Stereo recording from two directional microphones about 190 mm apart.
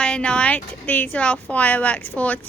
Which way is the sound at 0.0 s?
5° left (ahead or behind).